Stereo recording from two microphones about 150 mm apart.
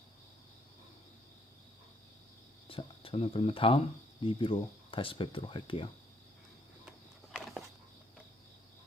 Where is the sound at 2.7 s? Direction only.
35° left (ahead or behind).